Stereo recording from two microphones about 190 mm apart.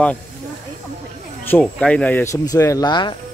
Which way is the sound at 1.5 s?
5° left (ahead or behind).